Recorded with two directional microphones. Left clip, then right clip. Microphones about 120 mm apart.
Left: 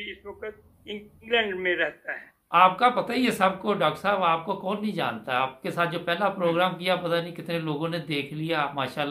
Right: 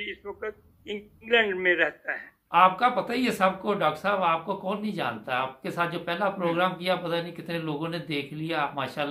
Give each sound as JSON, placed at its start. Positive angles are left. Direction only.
{"t": 0.0, "sound": "a man's voice", "side_deg": -35}
{"t": 2.5, "sound": "speech", "side_deg": 15}